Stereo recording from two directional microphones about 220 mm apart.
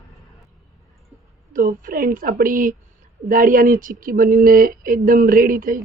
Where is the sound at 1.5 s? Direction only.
40° right (ahead or behind).